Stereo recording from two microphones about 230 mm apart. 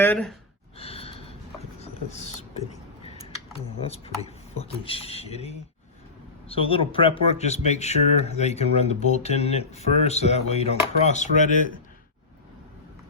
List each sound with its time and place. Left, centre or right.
0.0 s speech: centre
0.8 s sigh: left
1.8 s speech: left